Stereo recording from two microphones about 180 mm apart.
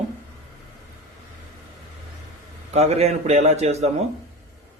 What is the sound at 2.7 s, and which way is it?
Speech, 35° right (ahead or behind).